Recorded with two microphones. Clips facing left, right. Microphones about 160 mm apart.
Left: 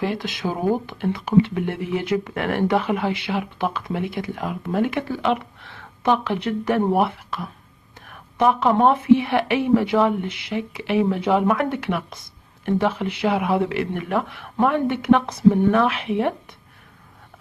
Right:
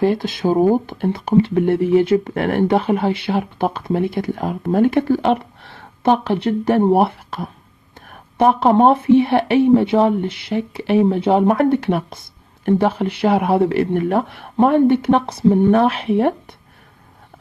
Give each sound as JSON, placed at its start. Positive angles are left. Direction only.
{"t": 0.2, "sound": "speech", "side_deg": -35}